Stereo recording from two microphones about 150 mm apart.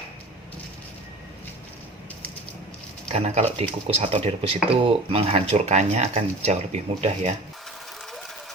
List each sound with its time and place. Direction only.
3.1 s speech: 45° right (ahead or behind)